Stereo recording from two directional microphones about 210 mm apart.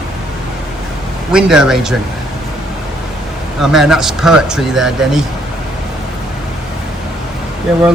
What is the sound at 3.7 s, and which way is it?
Speech, centre (ahead or behind).